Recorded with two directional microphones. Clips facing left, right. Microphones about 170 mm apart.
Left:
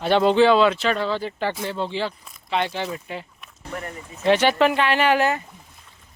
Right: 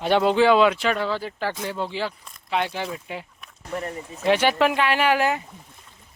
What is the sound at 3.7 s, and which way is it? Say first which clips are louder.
Speech: right 3 dB; 30° right (ahead or behind).